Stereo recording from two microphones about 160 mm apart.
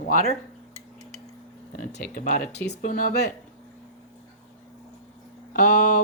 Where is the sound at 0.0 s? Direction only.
55° left (ahead or behind).